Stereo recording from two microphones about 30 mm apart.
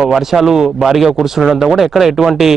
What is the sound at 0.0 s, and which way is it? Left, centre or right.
Speech, centre.